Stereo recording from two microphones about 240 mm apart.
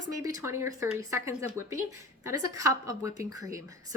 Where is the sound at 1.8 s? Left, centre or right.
Right.